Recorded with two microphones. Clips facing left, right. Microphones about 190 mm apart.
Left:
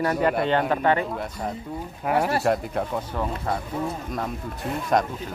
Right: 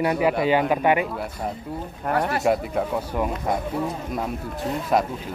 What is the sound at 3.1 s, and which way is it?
Speech, 15° right (ahead or behind).